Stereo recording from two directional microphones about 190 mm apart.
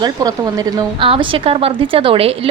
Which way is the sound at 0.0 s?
20° right (ahead or behind).